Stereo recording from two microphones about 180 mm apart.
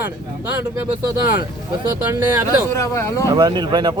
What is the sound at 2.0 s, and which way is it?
Speech, 10° right (ahead or behind).